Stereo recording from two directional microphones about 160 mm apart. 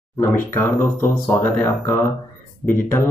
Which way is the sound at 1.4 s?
10° left (ahead or behind).